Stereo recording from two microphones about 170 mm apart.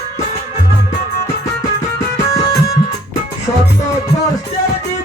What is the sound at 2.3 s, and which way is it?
Music, 20° left (ahead or behind).